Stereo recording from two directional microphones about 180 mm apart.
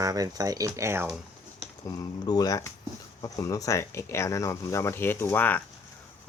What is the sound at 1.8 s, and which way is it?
Speech, 20° left (ahead or behind).